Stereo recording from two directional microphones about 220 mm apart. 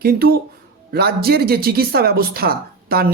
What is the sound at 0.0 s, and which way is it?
Speech, 45° right (ahead or behind).